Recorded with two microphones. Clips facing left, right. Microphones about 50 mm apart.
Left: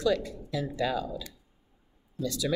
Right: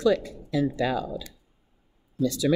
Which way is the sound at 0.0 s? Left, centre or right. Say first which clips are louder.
Right 4 dB; right.